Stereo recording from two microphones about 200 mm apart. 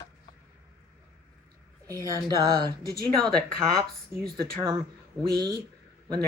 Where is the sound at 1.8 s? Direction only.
15° right (ahead or behind).